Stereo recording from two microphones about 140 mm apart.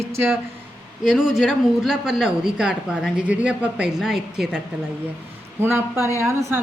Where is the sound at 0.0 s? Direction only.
15° right (ahead or behind).